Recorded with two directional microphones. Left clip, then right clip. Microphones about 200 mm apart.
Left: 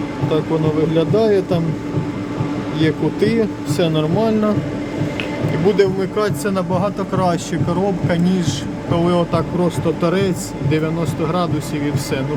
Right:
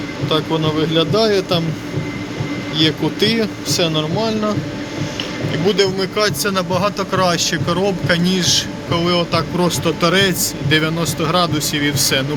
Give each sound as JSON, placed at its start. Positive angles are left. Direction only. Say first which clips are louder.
{"t": 0.3, "sound": "speech", "louder": "right 1 dB", "side_deg": 5}
{"t": 2.7, "sound": "speech", "louder": "right 2 dB", "side_deg": 10}
{"t": 5.6, "sound": "speech", "louder": "left 1 dB", "side_deg": 10}
{"t": 8.9, "sound": "speech", "louder": "left 1 dB", "side_deg": 20}
{"t": 9.6, "sound": "speech", "louder": "right 2 dB", "side_deg": 5}